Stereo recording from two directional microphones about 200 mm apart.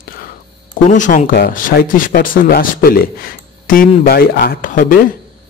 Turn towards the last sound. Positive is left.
turn(degrees=40)  # may be behind; listen again after turning